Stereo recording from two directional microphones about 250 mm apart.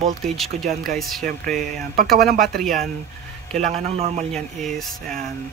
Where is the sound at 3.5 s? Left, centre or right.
Right.